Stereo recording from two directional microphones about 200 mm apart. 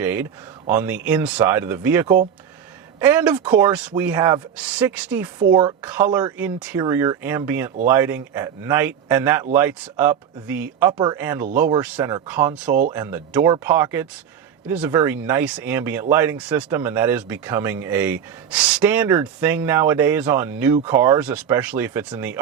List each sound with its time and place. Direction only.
0.0 s speech: 10° right (ahead or behind)
5.5 s speech: 25° right (ahead or behind)
5.8 s speech: 10° right (ahead or behind)
10.9 s speech: 20° right (ahead or behind)
11.2 s speech: 10° right (ahead or behind)